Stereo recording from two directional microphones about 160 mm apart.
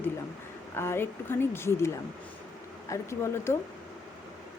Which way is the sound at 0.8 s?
15° left (ahead or behind).